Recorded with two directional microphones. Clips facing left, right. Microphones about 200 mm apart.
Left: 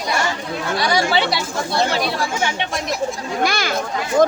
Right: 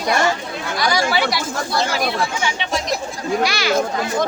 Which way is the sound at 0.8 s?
30° left (ahead or behind).